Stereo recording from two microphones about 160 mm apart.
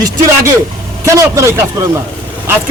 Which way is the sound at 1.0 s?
15° right (ahead or behind).